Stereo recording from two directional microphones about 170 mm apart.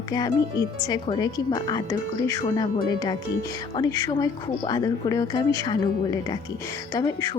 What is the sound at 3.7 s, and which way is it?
Speech, 20° left (ahead or behind).